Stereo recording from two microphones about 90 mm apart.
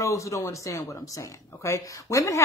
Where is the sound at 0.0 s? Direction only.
35° left (ahead or behind).